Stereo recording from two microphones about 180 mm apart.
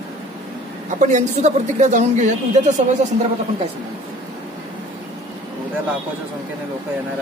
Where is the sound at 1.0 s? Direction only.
40° right (ahead or behind).